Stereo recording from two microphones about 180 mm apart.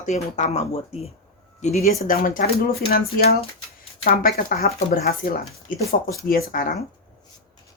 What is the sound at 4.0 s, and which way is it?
Speech, 55° left (ahead or behind).